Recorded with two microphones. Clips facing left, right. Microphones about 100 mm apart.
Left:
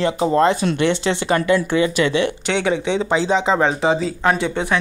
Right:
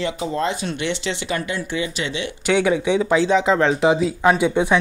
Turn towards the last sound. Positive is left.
turn(degrees=-10)  # may be behind; listen again after turning